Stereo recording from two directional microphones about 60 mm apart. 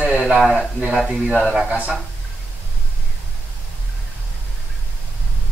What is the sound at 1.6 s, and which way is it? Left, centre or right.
Speech, right.